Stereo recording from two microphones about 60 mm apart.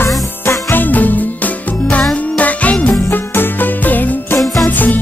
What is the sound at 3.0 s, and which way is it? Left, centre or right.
Music, left.